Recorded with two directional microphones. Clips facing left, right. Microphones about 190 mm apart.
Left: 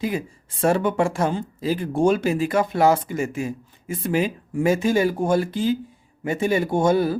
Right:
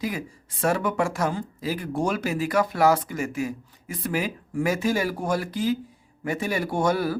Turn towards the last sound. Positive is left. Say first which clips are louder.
# left 4 dB
turn(degrees=25)  # may be behind; listen again after turning